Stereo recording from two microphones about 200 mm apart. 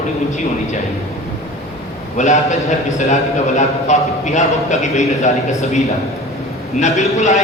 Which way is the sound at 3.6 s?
35° left (ahead or behind).